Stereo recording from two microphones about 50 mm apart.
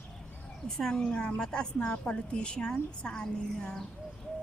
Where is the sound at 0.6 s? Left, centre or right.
Centre.